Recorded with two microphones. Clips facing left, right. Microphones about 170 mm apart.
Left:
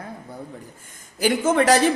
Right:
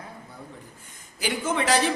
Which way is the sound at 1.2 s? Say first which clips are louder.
Left 8 dB; 45° left (ahead or behind).